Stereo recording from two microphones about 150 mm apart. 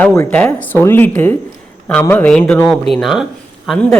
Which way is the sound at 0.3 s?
10° left (ahead or behind).